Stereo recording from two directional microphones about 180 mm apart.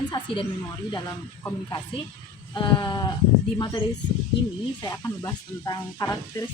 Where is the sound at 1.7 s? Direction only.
25° left (ahead or behind).